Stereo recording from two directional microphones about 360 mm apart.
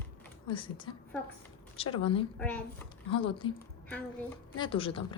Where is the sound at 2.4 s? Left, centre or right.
Centre.